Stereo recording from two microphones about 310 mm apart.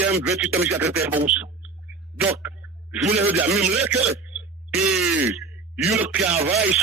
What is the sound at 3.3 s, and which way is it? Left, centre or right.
Speech, centre.